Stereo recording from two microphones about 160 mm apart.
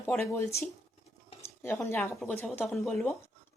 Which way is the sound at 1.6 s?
15° left (ahead or behind).